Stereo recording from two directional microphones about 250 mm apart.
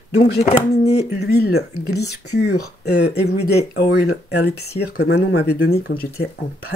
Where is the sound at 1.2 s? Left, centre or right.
Left.